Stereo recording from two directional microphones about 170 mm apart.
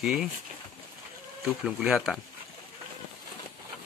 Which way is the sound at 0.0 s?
Centre (ahead or behind).